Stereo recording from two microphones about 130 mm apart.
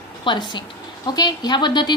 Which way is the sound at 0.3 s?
35° left (ahead or behind).